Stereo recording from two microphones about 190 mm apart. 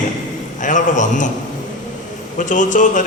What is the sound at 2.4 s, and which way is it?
Speech, 40° left (ahead or behind).